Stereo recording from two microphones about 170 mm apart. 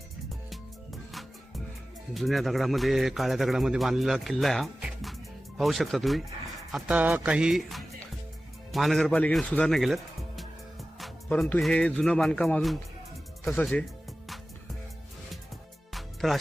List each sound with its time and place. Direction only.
2.1 s a man's voice: centre (ahead or behind)
15.9 s music: centre (ahead or behind)